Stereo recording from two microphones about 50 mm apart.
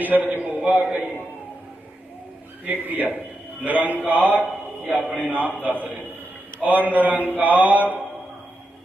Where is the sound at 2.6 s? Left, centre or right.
Right.